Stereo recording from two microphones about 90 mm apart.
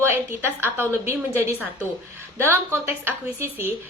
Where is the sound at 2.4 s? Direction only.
25° right (ahead or behind).